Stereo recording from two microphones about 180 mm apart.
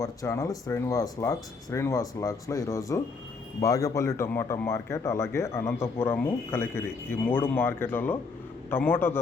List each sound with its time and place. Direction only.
0.0 s speech: 20° left (ahead or behind)